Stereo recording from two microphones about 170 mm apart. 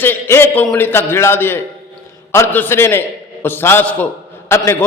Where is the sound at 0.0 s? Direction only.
15° left (ahead or behind).